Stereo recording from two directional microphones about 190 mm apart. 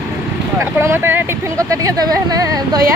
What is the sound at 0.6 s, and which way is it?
Speech, 10° right (ahead or behind).